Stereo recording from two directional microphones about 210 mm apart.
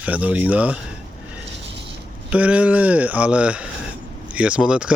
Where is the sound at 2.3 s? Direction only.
5° right (ahead or behind).